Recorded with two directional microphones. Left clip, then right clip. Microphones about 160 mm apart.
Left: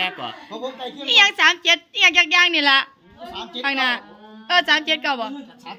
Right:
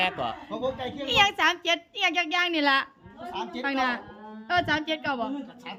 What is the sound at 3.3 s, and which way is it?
Speech, 20° left (ahead or behind).